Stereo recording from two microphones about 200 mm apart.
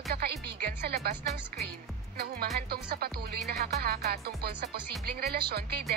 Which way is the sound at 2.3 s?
50° right (ahead or behind).